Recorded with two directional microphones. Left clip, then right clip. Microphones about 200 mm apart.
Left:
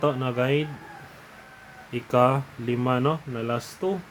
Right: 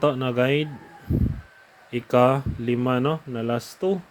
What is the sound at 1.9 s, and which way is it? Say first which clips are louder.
Speech: right 2 dB; 25° right (ahead or behind).